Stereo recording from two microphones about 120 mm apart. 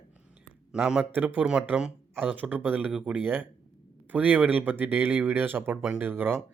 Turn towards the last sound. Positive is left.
turn(degrees=-20)  # may be behind; listen again after turning